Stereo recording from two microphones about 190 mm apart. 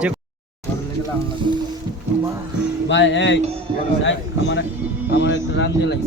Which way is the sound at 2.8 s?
70° left (ahead or behind).